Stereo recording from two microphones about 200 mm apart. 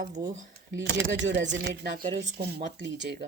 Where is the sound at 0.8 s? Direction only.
60° right (ahead or behind).